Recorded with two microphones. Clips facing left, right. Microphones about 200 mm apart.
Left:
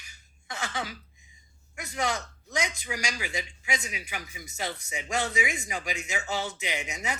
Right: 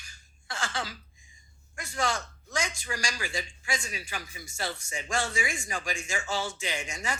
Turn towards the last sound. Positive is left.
turn(degrees=20)  # may be behind; listen again after turning